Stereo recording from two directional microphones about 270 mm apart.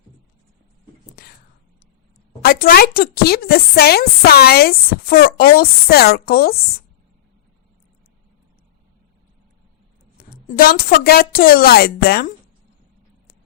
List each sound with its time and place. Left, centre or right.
1.1 s whispering: left
2.4 s speech: left
10.2 s a sound: left
10.5 s speech: left